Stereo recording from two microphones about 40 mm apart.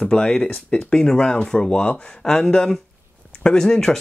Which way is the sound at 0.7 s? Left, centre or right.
Left.